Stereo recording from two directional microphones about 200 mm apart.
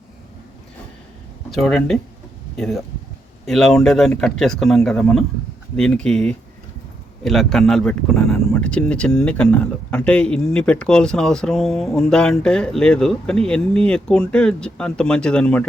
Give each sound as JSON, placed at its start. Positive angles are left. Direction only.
{"t": 1.5, "sound": "speech", "side_deg": 0}